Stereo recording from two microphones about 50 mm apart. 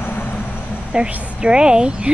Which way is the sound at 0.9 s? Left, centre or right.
Right.